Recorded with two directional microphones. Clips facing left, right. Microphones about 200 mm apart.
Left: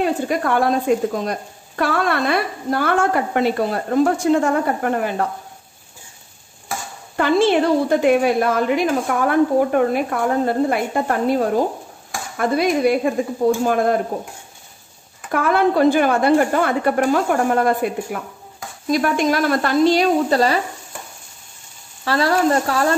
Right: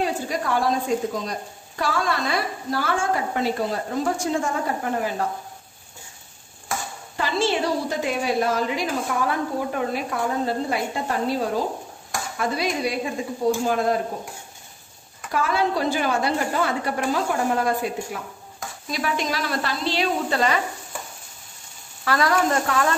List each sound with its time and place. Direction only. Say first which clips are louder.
0.0 s speech: left 6 dB; 60° left (ahead or behind)
7.2 s speech: left 8 dB; 55° left (ahead or behind)
15.3 s speech: left 6 dB; 55° left (ahead or behind); by 20.6 s 35° left (ahead or behind)
22.0 s speech: left 4 dB; 30° left (ahead or behind)